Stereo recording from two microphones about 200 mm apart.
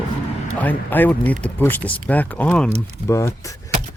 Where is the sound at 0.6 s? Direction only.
10° left (ahead or behind).